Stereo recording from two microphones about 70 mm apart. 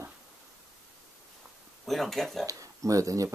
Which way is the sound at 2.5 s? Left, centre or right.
Right.